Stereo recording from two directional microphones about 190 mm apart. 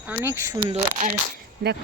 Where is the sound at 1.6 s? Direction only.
55° right (ahead or behind).